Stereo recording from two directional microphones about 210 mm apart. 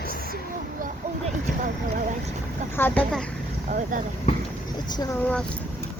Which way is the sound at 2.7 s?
10° left (ahead or behind).